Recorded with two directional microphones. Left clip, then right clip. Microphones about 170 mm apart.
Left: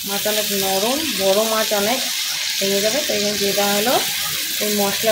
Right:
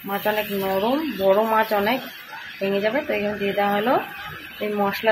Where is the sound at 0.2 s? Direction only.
20° left (ahead or behind).